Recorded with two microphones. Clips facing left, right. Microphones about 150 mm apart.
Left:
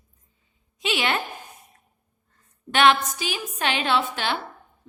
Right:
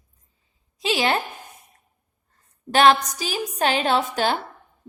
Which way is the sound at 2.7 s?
40° right (ahead or behind).